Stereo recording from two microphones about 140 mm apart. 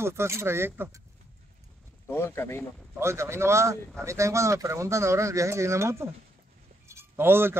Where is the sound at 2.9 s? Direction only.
20° right (ahead or behind).